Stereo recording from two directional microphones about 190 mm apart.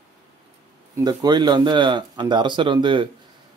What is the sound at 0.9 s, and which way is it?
Speech, 20° right (ahead or behind).